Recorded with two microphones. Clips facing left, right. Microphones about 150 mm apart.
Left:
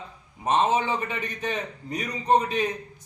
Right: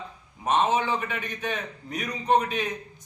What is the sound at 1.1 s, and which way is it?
A man's voice, 35° left (ahead or behind).